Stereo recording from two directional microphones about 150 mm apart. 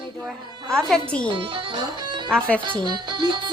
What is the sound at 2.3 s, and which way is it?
Speech, 5° left (ahead or behind).